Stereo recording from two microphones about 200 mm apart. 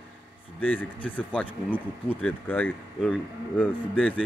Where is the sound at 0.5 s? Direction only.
10° left (ahead or behind).